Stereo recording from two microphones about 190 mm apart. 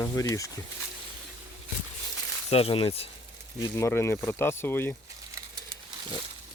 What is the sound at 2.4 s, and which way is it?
Speech, 30° left (ahead or behind).